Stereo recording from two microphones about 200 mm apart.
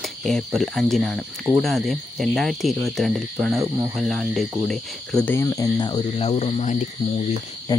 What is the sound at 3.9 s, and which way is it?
Speech, centre (ahead or behind).